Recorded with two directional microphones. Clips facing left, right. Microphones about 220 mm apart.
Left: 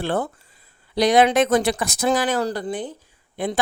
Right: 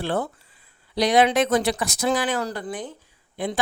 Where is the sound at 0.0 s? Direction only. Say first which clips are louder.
Left 2 dB; 55° left (ahead or behind); by 2.9 s 30° left (ahead or behind).